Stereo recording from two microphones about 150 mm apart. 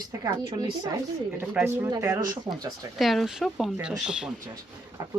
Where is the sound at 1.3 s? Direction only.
10° right (ahead or behind).